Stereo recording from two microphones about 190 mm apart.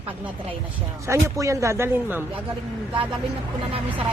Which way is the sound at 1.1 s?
15° right (ahead or behind).